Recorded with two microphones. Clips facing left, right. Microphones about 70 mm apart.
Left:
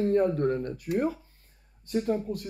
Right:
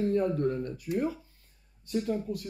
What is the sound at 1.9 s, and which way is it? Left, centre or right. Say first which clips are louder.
Speech: left 3 dB; left.